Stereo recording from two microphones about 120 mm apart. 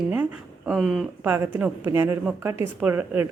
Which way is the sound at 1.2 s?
15° right (ahead or behind).